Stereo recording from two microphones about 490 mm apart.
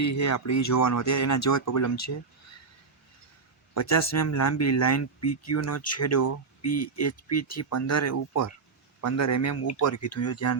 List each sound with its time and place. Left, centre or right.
0.0 s speech: left
3.8 s speech: left